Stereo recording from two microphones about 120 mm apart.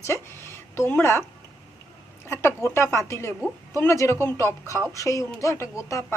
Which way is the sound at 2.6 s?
25° left (ahead or behind).